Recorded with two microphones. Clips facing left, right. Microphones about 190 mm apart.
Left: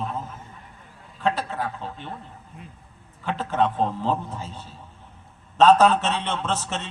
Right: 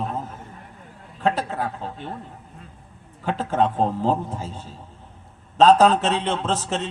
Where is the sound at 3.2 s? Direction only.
45° right (ahead or behind).